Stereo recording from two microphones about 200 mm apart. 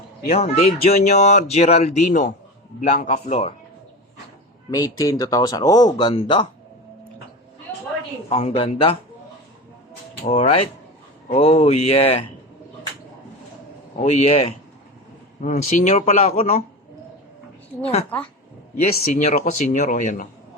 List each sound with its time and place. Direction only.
0.3 s speech: 30° left (ahead or behind)
4.7 s speech: 15° left (ahead or behind)
8.3 s speech: 30° left (ahead or behind)
10.2 s speech: 30° left (ahead or behind)
14.0 s speech: 35° left (ahead or behind)
19.1 s speech: 35° left (ahead or behind)